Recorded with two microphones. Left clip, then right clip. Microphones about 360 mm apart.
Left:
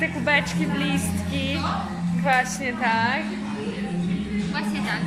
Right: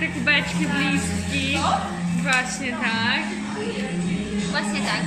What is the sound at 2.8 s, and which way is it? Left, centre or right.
Speech, centre.